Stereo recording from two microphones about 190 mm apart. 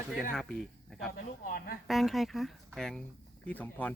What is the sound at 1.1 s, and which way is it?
Speech, 50° left (ahead or behind).